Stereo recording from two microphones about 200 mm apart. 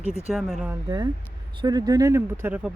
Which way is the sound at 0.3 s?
Centre (ahead or behind).